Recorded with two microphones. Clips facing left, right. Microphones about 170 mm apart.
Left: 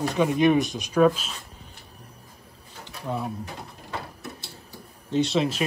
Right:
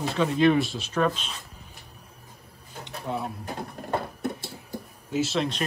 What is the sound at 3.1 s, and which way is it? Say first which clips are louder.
Speech: left 1 dB; 20° right (ahead or behind).